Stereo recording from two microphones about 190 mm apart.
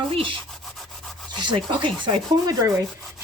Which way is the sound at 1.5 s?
25° right (ahead or behind).